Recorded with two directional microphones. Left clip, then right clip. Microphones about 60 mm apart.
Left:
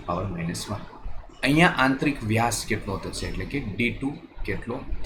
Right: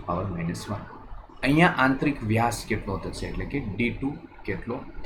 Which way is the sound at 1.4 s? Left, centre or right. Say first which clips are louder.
Left 1 dB; centre.